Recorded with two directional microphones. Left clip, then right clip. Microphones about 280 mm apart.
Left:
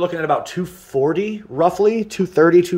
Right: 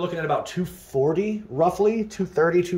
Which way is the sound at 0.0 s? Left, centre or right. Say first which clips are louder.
Left 6 dB; centre.